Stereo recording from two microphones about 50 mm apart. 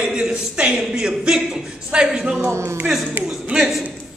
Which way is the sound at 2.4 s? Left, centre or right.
Right.